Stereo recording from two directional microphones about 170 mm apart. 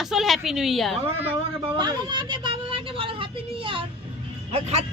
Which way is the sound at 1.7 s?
25° right (ahead or behind).